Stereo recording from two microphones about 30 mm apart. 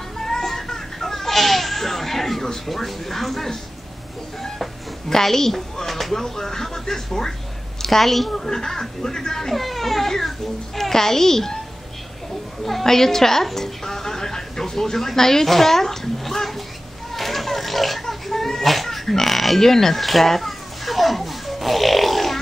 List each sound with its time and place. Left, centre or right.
0.2 s goat: centre
2.6 s a woman's voice: centre
5.1 s a woman's voice: centre
5.9 s chopping: centre
6.1 s a woman's voice: centre
8.0 s a child's voice: centre
8.5 s a woman's voice: centre
9.5 s a child's voice: centre
12.8 s a woman's voice: centre
17.1 s pig: centre
18.0 s a sound: centre
19.0 s oink: centre
19.6 s a sound: centre